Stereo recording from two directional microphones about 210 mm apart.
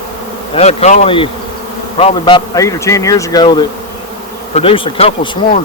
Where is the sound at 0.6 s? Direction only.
30° left (ahead or behind).